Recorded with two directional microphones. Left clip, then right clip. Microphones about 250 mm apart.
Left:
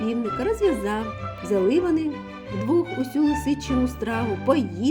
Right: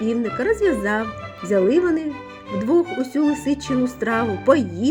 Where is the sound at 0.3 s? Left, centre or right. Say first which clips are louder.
Right 3 dB; right.